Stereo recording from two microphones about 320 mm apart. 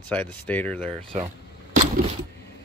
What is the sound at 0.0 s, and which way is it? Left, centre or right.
Speech, centre.